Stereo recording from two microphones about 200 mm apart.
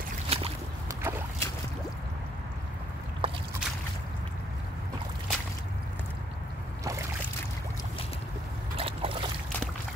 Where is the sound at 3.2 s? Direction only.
25° right (ahead or behind).